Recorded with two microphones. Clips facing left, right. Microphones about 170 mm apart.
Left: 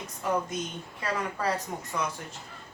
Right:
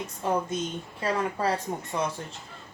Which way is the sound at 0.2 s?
30° right (ahead or behind).